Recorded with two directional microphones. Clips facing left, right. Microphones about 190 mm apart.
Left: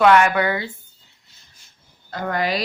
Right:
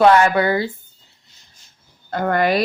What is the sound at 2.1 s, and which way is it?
Speech, 55° right (ahead or behind).